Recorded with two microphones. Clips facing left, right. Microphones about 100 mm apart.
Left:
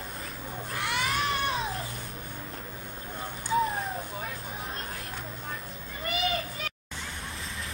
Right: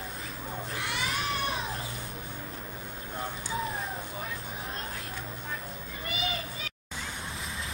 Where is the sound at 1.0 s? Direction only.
35° left (ahead or behind).